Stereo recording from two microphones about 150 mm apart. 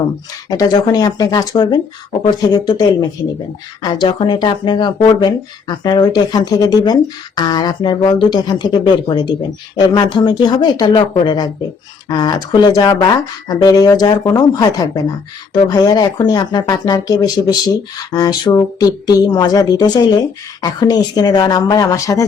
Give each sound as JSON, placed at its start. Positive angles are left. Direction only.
{"t": 0.5, "sound": "speech", "side_deg": 25}